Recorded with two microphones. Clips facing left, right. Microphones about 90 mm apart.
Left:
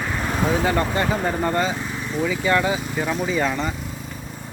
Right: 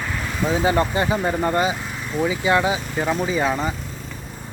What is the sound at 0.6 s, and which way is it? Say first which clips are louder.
Speech: right 1 dB; 15° right (ahead or behind).